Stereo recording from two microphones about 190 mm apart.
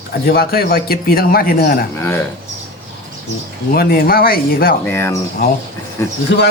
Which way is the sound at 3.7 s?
55° left (ahead or behind).